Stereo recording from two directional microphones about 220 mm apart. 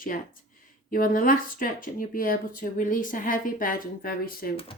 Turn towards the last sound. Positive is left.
turn(degrees=40)  # may be behind; listen again after turning